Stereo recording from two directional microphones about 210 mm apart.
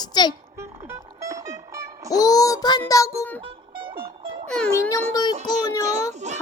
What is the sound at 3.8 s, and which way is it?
Music, 25° right (ahead or behind).